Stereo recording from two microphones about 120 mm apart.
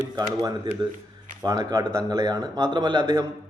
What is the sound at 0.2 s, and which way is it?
A man's voice, 35° right (ahead or behind).